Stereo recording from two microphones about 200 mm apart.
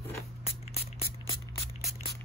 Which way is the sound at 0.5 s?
30° left (ahead or behind).